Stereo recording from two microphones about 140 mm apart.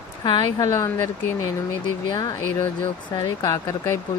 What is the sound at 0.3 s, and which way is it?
Speech, 30° left (ahead or behind).